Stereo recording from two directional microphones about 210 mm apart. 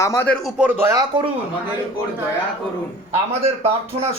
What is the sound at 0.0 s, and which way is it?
Speech, 15° left (ahead or behind).